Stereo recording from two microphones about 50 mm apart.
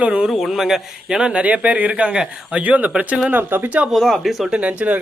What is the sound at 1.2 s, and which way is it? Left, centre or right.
Speech, centre.